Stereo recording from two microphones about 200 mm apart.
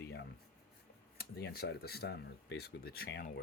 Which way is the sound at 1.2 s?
55° left (ahead or behind).